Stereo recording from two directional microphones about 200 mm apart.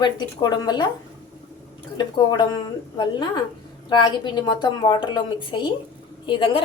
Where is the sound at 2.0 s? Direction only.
20° left (ahead or behind).